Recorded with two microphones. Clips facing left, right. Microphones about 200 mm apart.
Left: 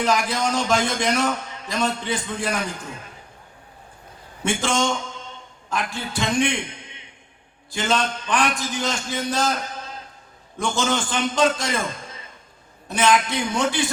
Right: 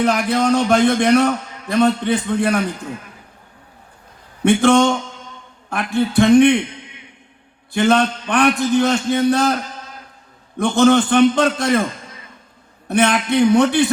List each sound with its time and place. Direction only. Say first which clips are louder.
0.0 s a man's voice: right 5 dB; 60° right (ahead or behind)
4.4 s a man's voice: right 10 dB; 60° right (ahead or behind)
7.7 s a man's voice: right 8 dB; 60° right (ahead or behind)
10.6 s a man's voice: right 10 dB; 60° right (ahead or behind)
12.9 s a man's voice: right 4 dB; 60° right (ahead or behind)